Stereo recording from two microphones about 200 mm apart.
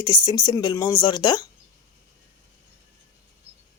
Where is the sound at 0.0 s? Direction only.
20° left (ahead or behind).